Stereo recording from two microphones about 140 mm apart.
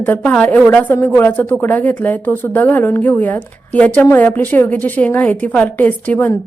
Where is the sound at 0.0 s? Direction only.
10° left (ahead or behind).